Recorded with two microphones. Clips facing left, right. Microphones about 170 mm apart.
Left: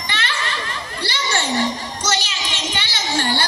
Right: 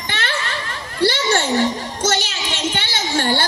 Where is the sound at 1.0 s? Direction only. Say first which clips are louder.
Right 7 dB; 50° right (ahead or behind).